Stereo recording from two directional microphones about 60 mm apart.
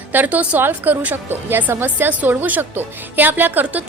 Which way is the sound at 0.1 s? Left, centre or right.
Right.